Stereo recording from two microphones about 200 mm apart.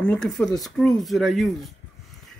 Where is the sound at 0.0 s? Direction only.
5° left (ahead or behind).